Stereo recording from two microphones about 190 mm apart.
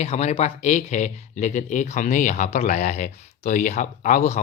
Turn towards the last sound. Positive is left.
turn(degrees=35)  # may be behind; listen again after turning